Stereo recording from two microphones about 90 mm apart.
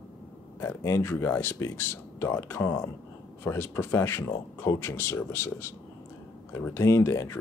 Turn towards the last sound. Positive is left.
turn(degrees=35)  # may be behind; listen again after turning